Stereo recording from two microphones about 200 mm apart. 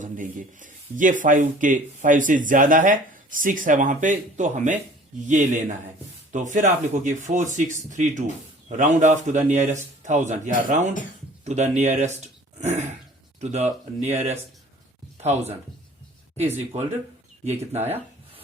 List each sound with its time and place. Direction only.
0.0 s speech: 40° right (ahead or behind)
17.4 s speech: 35° right (ahead or behind)